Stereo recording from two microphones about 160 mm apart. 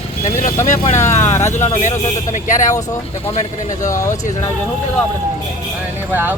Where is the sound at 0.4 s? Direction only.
45° left (ahead or behind).